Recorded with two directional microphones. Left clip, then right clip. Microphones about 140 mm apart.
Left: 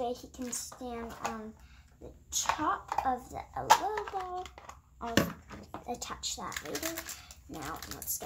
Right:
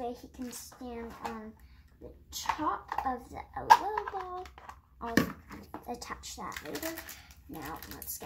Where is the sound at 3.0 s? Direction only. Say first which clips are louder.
Left 2 dB; 20° left (ahead or behind).